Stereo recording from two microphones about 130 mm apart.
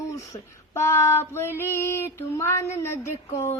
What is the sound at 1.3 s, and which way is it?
A woman's voice, 20° left (ahead or behind).